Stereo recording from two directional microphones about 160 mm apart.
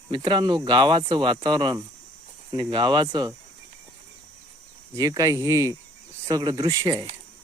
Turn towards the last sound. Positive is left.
turn(degrees=-25)  # may be behind; listen again after turning